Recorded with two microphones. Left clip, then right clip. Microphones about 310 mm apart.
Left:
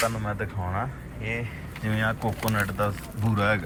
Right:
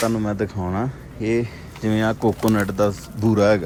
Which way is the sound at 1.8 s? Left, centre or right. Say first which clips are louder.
Right 7 dB; centre.